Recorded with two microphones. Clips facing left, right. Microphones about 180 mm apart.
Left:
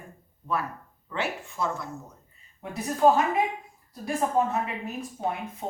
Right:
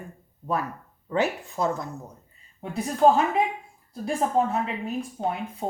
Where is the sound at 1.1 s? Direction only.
40° right (ahead or behind).